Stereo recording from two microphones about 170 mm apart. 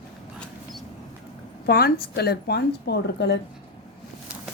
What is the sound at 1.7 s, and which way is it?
A woman's voice, 65° left (ahead or behind).